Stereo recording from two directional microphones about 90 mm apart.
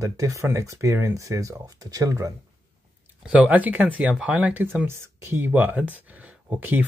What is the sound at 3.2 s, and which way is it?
Speech, 15° right (ahead or behind).